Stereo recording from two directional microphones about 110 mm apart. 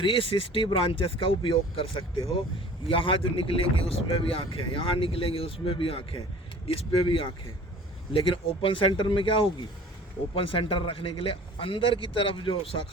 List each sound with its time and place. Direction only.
0.0 s a man's voice: 50° left (ahead or behind)